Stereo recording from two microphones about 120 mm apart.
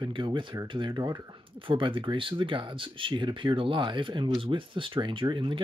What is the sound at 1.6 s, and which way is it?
Speech, 45° right (ahead or behind).